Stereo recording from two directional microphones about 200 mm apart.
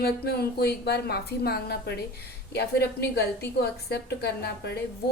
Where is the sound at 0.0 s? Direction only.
50° left (ahead or behind).